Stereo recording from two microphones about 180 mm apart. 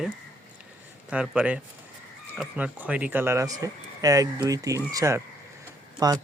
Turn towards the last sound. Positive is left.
turn(degrees=-20)  # may be behind; listen again after turning